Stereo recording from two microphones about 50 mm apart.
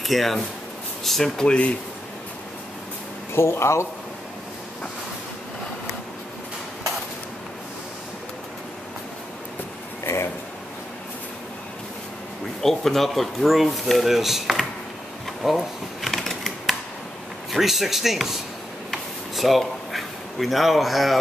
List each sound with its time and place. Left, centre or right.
0.0 s speech: centre
3.3 s speech: left
12.6 s speech: centre
15.4 s shuffling cards: centre
17.5 s speech: centre
18.9 s a sound: centre